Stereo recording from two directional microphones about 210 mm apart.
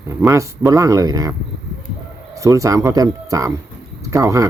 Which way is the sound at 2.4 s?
15° right (ahead or behind).